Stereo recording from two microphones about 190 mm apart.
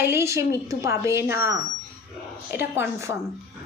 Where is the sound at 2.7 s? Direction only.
15° right (ahead or behind).